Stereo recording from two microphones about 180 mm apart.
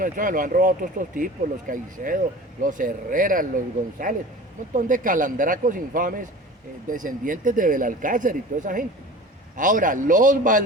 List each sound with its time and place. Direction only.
0.0 s speech: 50° right (ahead or behind)